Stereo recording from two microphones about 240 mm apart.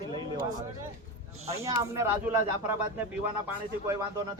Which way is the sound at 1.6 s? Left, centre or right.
Centre.